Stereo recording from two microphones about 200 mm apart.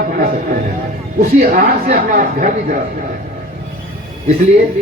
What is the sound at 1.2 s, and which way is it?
Speech, 45° right (ahead or behind).